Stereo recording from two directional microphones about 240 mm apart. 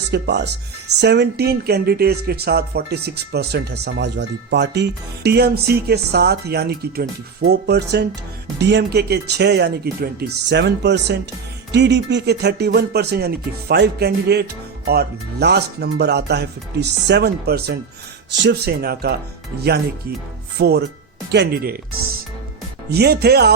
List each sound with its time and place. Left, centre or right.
0.1 s speech: right
20.6 s speech: right
22.9 s speech: right